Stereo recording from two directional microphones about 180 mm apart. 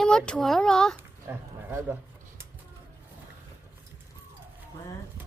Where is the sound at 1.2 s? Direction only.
10° right (ahead or behind).